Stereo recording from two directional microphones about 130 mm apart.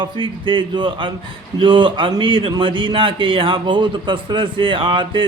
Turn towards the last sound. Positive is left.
turn(degrees=-40)  # may be behind; listen again after turning